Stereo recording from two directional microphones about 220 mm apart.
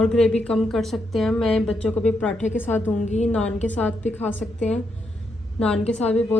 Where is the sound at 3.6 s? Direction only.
5° left (ahead or behind).